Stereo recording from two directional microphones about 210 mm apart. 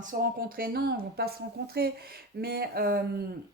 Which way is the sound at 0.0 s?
40° right (ahead or behind).